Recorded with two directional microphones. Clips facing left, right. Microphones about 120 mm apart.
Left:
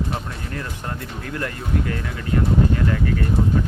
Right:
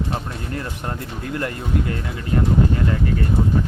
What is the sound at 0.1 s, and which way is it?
Speech, 30° right (ahead or behind).